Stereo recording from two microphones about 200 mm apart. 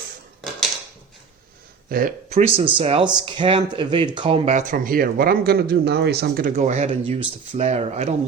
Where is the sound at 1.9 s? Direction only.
45° right (ahead or behind).